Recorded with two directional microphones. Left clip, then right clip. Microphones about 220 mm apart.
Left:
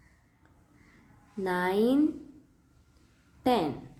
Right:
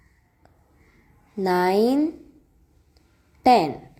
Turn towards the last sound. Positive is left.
turn(degrees=-30)  # may be behind; listen again after turning